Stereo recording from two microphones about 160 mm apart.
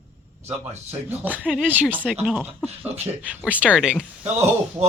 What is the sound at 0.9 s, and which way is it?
Speech, 10° right (ahead or behind).